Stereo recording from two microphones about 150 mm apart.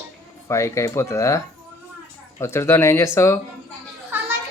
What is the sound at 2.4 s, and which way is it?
Speech, 20° left (ahead or behind).